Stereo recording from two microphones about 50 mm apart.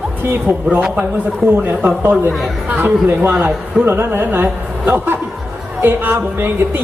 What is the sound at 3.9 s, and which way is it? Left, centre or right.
Speech, right.